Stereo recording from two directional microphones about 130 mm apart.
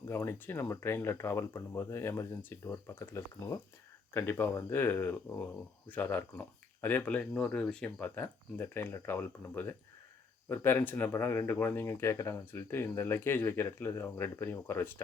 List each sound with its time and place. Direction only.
0.1 s speech: 20° left (ahead or behind)